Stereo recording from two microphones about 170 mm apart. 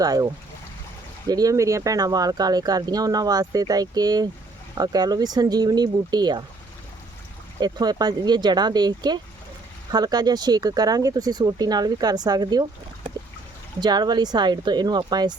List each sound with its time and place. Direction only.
0.0 s speech: 20° right (ahead or behind)
1.3 s speech: 20° right (ahead or behind)
7.6 s speech: 25° right (ahead or behind)
13.7 s speech: 25° right (ahead or behind)